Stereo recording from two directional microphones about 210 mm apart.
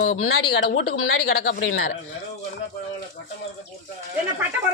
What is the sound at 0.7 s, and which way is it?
Speech, 90° left.